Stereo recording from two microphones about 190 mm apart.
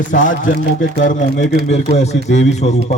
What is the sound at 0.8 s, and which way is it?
Speech, 80° left.